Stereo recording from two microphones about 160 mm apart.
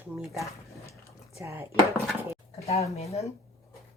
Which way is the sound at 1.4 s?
15° right (ahead or behind).